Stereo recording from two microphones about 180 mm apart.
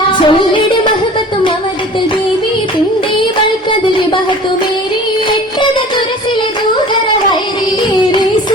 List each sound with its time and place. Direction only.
0.3 s music: 25° left (ahead or behind)